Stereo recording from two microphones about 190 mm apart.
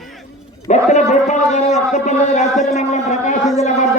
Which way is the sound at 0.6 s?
40° left (ahead or behind).